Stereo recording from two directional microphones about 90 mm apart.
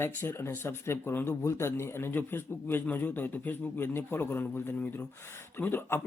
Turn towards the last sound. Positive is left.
turn(degrees=25)  # may be behind; listen again after turning